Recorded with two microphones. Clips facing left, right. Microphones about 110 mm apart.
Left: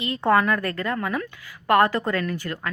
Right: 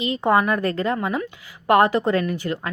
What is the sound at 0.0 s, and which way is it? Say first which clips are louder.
Speech: right 1 dB; 20° right (ahead or behind).